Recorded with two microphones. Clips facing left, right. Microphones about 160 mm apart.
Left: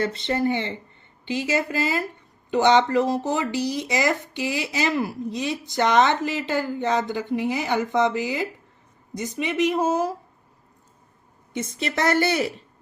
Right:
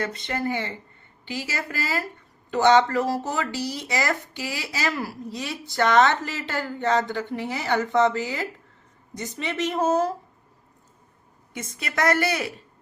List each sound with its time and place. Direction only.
0.0 s a woman's voice: 30° left (ahead or behind); by 10.2 s 10° left (ahead or behind)
11.5 s a woman's voice: 25° left (ahead or behind)